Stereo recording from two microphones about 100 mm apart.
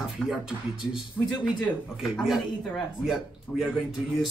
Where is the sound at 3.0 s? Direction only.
5° right (ahead or behind).